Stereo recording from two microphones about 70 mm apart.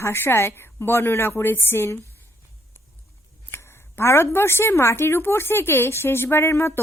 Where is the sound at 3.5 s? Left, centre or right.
Left.